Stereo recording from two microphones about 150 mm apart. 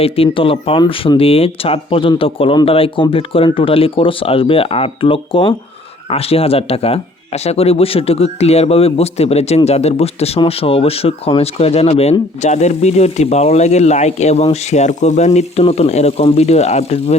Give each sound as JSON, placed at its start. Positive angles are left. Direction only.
{"t": 0.0, "sound": "speech", "side_deg": 40}